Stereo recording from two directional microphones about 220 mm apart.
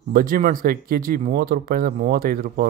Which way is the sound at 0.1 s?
40° right (ahead or behind).